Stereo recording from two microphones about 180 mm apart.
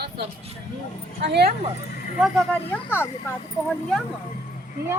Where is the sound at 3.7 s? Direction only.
Centre (ahead or behind).